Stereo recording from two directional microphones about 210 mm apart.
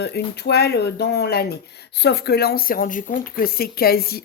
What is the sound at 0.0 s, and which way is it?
Speech, 50° left (ahead or behind).